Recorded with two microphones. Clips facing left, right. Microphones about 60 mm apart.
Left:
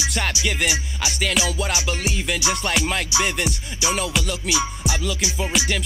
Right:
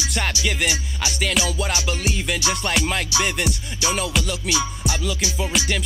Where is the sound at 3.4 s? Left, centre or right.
Centre.